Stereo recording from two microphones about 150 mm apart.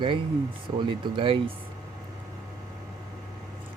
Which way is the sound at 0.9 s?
35° right (ahead or behind).